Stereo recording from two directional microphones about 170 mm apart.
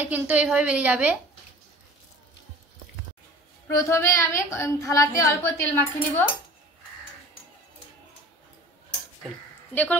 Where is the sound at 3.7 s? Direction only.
15° left (ahead or behind).